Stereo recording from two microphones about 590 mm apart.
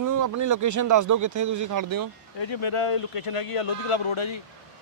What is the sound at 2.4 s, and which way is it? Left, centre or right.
Speech, left.